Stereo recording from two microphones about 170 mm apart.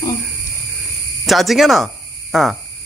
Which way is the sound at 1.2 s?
Centre (ahead or behind).